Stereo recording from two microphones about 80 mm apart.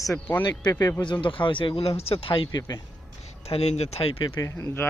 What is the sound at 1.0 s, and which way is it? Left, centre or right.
Speech, left.